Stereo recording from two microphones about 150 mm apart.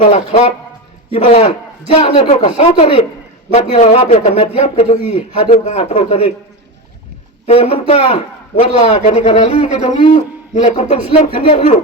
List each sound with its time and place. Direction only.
0.0 s a man's voice: 50° left (ahead or behind)
7.4 s a man's voice: 40° left (ahead or behind)